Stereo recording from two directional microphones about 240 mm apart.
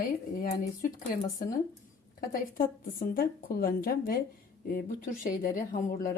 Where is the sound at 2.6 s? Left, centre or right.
Left.